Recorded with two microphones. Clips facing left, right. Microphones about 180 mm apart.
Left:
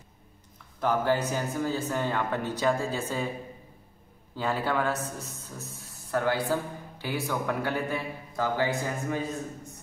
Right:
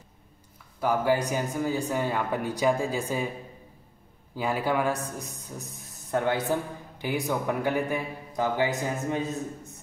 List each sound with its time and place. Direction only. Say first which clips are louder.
0.7 s a man's voice: right 1 dB; 10° right (ahead or behind)
4.4 s a man's voice: right 2 dB; 10° right (ahead or behind)